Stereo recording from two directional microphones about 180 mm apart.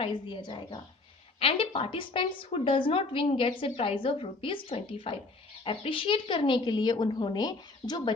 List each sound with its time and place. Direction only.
0.0 s a woman's voice: 25° left (ahead or behind)